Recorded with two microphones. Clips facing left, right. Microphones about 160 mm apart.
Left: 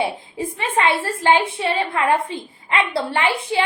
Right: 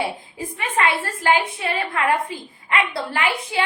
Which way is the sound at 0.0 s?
30° left (ahead or behind).